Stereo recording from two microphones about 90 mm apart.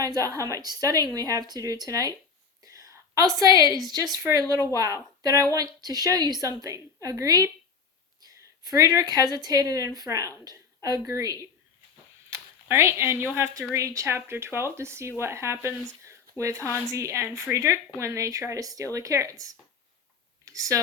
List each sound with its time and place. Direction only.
0.0 s speech: 40° right (ahead or behind)
2.7 s a sound: 40° right (ahead or behind)
3.8 s a woman's voice: 45° right (ahead or behind)
8.6 s speech: 40° right (ahead or behind)